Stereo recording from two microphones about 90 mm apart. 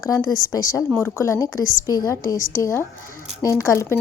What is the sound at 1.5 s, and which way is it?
A woman's voice, 40° left (ahead or behind).